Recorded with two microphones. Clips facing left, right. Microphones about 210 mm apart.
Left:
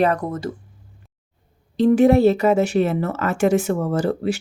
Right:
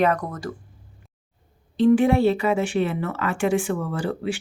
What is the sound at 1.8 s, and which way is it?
A woman's voice, 40° left (ahead or behind).